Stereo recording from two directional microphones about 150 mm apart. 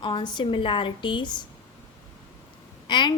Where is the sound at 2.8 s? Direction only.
30° left (ahead or behind).